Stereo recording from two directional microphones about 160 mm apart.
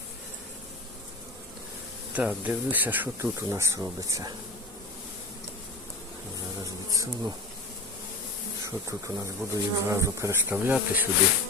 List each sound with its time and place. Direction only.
2.1 s speech: 10° right (ahead or behind)
6.9 s bee: 20° right (ahead or behind)
8.6 s speech: 20° right (ahead or behind)